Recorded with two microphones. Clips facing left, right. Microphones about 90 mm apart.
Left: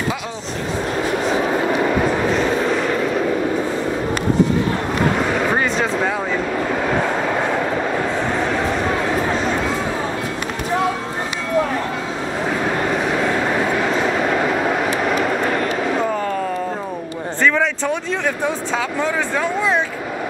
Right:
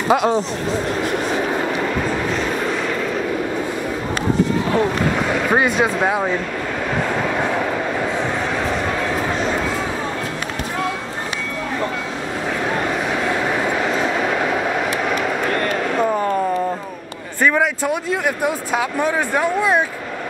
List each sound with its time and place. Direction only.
0.1 s speech: 55° right (ahead or behind)
5.5 s speech: 15° right (ahead or behind)
14.9 s vehicle: centre (ahead or behind)
17.4 s speech: 15° right (ahead or behind)